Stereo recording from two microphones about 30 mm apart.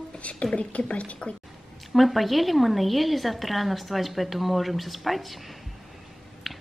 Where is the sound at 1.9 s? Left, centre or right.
Centre.